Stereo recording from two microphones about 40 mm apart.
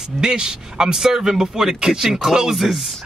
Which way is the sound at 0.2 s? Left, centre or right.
Centre.